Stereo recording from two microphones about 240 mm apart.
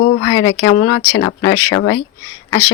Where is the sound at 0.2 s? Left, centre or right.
Centre.